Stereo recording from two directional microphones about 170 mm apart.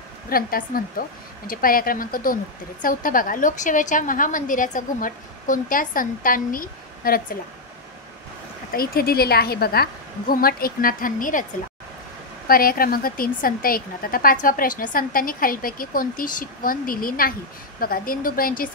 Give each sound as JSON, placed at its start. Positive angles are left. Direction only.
{"t": 0.3, "sound": "a woman's voice", "side_deg": 60}
{"t": 8.7, "sound": "a woman's voice", "side_deg": 60}
{"t": 12.4, "sound": "a woman's voice", "side_deg": 60}